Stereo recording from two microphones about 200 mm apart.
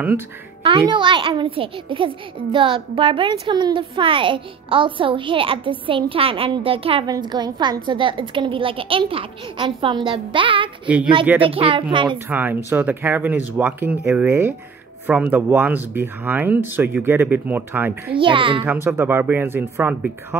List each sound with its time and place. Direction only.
0.7 s a child's voice: 25° right (ahead or behind)
12.3 s speech: 10° right (ahead or behind)
18.2 s a child's voice: 25° right (ahead or behind)
18.7 s speech: 10° right (ahead or behind)